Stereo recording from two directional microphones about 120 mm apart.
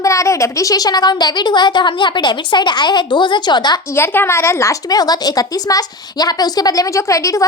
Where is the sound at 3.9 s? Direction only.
20° left (ahead or behind).